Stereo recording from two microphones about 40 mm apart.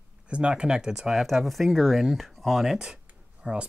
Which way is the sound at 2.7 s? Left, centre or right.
Centre.